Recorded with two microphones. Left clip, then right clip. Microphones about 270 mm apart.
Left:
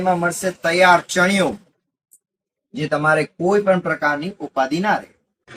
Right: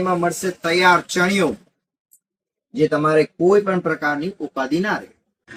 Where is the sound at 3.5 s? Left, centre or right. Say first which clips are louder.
Left 5 dB; centre.